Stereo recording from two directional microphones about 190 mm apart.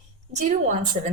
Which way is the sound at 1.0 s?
40° right (ahead or behind).